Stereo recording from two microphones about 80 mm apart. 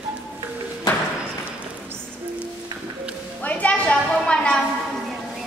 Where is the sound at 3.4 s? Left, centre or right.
Centre.